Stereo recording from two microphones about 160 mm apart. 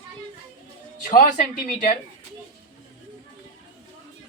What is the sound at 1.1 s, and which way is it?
Speech, 55° left (ahead or behind).